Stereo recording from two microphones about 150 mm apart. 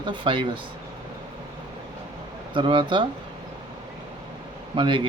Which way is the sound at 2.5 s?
35° right (ahead or behind).